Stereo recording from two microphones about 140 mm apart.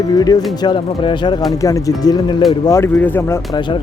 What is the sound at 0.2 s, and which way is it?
Speech, 30° left (ahead or behind).